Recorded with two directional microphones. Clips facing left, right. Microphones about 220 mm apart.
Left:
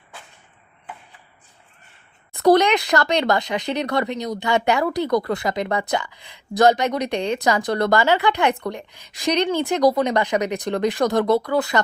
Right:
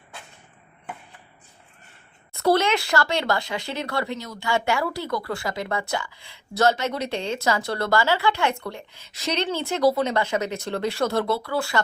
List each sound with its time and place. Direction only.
2.4 s speech: 15° left (ahead or behind)